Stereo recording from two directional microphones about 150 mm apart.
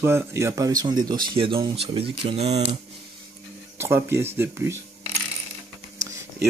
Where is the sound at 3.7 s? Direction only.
15° right (ahead or behind).